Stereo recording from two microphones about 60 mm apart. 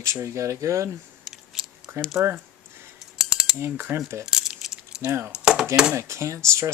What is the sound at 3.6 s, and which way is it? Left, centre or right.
Cutlery, right.